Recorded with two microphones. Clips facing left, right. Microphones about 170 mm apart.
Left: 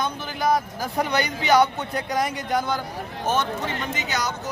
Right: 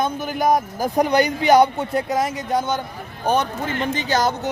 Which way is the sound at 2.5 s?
20° right (ahead or behind).